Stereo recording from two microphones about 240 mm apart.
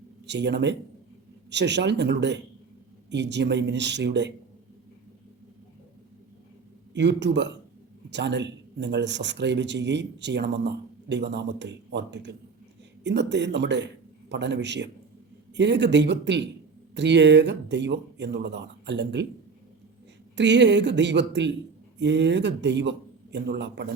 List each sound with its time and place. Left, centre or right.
0.3 s speech: right
6.9 s a man's voice: right
20.3 s speech: right